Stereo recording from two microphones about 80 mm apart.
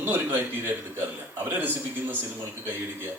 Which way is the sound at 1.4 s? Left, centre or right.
Right.